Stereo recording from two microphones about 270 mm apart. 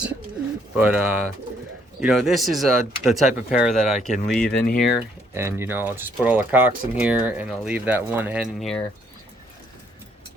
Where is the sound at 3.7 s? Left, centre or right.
Left.